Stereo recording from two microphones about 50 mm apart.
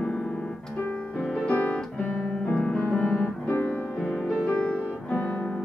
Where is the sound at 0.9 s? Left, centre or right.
Left.